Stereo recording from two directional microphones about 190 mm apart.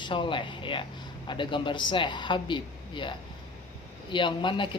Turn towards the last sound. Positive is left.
turn(degrees=25)  # may be behind; listen again after turning